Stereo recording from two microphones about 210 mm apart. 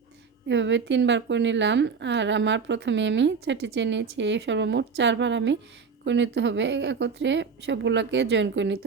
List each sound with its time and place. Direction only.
0.4 s a woman's voice: 60° right (ahead or behind)